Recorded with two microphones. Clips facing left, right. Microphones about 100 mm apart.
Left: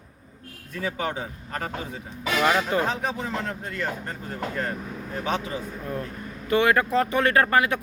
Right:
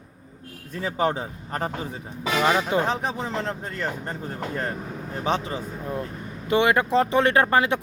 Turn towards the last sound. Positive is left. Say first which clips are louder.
# right 1 dB
turn(degrees=-25)  # may be behind; listen again after turning